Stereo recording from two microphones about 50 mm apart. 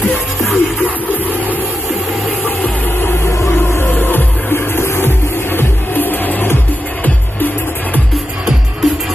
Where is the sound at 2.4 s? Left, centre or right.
Left.